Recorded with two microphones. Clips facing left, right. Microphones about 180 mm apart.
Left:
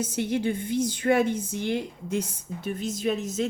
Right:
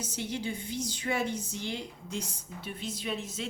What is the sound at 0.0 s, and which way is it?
A woman's voice, 55° left (ahead or behind).